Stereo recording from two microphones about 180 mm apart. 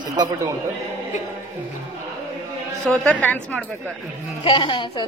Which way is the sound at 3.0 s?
10° left (ahead or behind).